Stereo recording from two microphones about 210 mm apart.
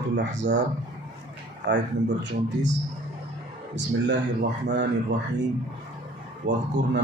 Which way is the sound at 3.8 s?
55° right (ahead or behind).